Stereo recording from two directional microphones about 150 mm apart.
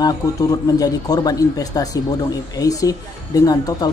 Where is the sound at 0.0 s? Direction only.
25° left (ahead or behind).